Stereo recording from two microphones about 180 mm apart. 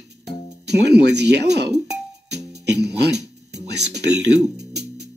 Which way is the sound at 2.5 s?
70° right (ahead or behind).